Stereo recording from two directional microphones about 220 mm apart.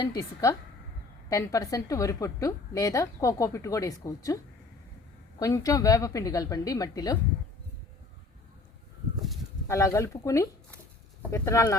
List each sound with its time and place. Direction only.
0.0 s a woman's voice: 15° left (ahead or behind)
5.4 s a woman's voice: 15° left (ahead or behind)
9.6 s a woman's voice: 15° left (ahead or behind)